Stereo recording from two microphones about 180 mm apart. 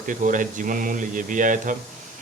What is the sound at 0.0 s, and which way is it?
Speech, 45° right (ahead or behind).